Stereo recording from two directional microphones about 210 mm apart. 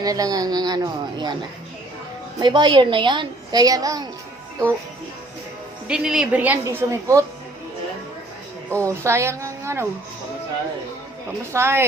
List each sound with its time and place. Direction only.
0.0 s a woman's voice: 15° right (ahead or behind)
5.9 s a woman's voice: 5° right (ahead or behind)
8.7 s a woman's voice: 15° right (ahead or behind)
11.5 s a woman's voice: 10° right (ahead or behind)